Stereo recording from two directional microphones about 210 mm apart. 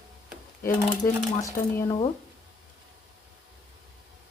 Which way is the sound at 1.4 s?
15° left (ahead or behind).